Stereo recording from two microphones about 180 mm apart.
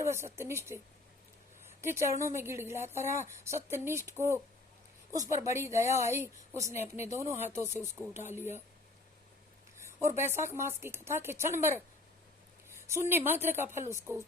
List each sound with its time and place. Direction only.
0.0 s a woman's voice: 15° right (ahead or behind)
1.8 s a woman's voice: 15° right (ahead or behind)
5.4 s a woman's voice: 15° right (ahead or behind)
9.7 s a woman's voice: 15° right (ahead or behind)